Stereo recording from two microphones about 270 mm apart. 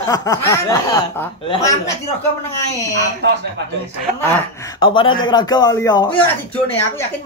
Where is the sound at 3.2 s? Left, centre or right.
Right.